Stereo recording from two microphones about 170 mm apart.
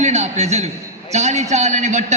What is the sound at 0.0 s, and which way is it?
A man's voice, 40° right (ahead or behind).